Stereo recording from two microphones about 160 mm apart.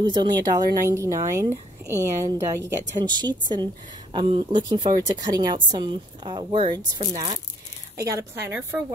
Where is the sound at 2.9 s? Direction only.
25° right (ahead or behind).